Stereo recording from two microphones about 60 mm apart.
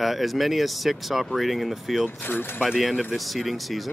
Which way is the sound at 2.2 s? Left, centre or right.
Left.